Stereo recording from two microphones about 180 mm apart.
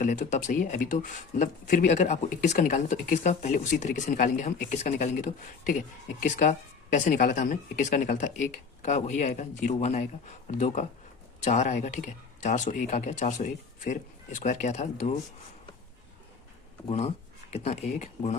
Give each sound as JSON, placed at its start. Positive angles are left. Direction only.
{"t": 0.0, "sound": "speech", "side_deg": 45}
{"t": 16.9, "sound": "speech", "side_deg": 35}